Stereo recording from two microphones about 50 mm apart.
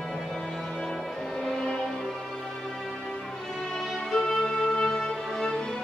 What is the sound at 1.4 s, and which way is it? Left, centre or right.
Music, centre.